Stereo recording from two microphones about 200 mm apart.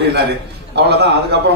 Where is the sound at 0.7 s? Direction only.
55° right (ahead or behind).